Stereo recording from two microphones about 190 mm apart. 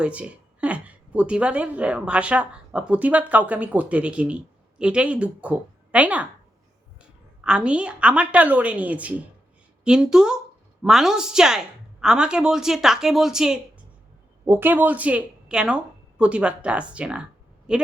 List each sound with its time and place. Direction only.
0.0 s a woman's voice: 5° right (ahead or behind)
7.4 s a woman's voice: 5° right (ahead or behind)